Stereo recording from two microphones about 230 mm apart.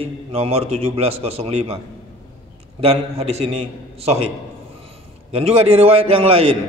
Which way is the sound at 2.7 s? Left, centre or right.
Right.